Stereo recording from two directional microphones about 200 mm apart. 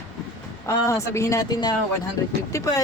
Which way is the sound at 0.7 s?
15° left (ahead or behind).